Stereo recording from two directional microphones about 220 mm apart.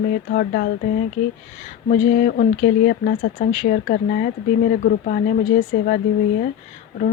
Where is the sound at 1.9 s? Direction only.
40° left (ahead or behind).